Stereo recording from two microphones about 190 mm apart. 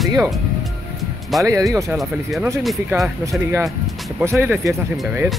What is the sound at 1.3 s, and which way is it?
Speech, centre (ahead or behind).